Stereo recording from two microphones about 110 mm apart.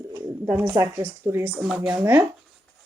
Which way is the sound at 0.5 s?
20° right (ahead or behind).